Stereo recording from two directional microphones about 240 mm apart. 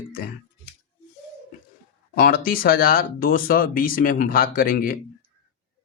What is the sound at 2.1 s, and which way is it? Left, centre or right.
Speech, left.